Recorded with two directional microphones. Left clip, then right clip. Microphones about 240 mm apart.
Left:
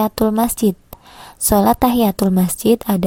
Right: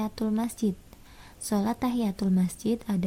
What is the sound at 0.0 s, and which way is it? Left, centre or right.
A woman's voice, left.